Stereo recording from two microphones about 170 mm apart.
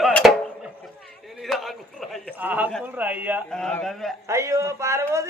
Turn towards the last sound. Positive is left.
turn(degrees=-15)  # may be behind; listen again after turning